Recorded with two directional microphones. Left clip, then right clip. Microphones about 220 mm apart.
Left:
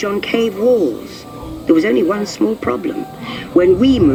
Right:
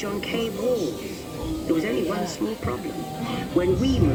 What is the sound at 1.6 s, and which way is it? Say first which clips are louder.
Speech: left 12 dB; 60° left (ahead or behind).